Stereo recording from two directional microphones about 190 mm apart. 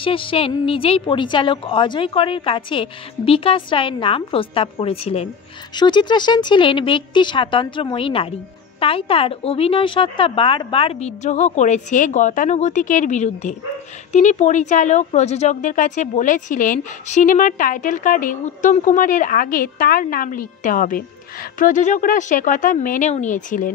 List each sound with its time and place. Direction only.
0.0 s a woman's voice: 30° left (ahead or behind); by 23.7 s 45° left (ahead or behind)